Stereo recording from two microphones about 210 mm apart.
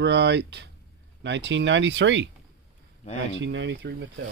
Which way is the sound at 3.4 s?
60° right (ahead or behind).